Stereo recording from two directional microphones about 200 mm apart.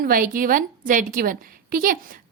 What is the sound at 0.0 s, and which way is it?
A woman's voice, 45° right (ahead or behind).